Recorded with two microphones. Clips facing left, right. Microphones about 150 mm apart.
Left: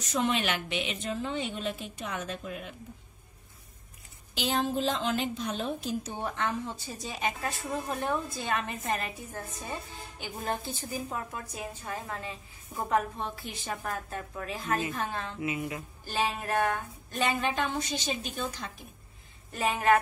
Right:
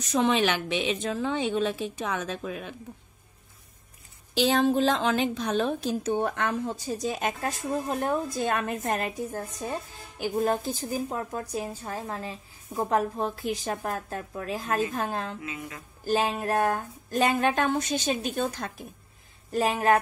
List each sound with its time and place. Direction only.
1.1 s a woman's voice: 90° right
4.4 s a woman's voice: 80° right
6.1 s a woman's voice: 55° right (ahead or behind)
15.4 s music: 20° left (ahead or behind)
16.1 s a woman's voice: 40° right (ahead or behind); by 18.8 s 55° right (ahead or behind)
19.5 s a woman's voice: 35° right (ahead or behind)